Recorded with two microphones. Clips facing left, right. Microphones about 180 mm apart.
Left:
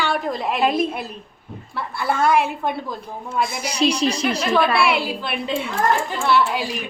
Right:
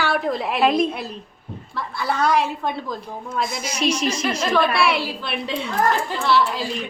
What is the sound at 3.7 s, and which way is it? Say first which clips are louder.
Speech: left 3 dB; 35° left (ahead or behind).